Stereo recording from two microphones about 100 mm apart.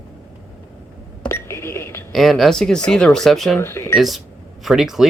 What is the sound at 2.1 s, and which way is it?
Speech, centre (ahead or behind).